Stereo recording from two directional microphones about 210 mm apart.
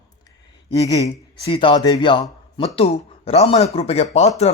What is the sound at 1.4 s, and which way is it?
Speech, 25° left (ahead or behind).